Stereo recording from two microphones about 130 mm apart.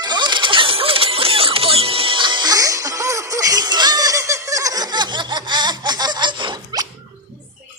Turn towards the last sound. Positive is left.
turn(degrees=-35)  # may be behind; listen again after turning